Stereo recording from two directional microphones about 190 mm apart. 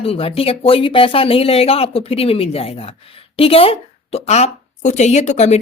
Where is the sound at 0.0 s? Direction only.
30° left (ahead or behind).